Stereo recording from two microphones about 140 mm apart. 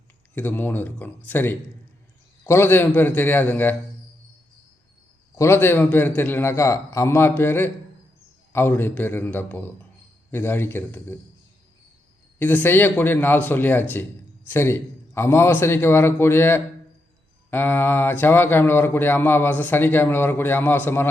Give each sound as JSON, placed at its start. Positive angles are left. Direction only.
{"t": 0.3, "sound": "speech", "side_deg": 15}
{"t": 5.4, "sound": "speech", "side_deg": 15}
{"t": 12.4, "sound": "speech", "side_deg": 10}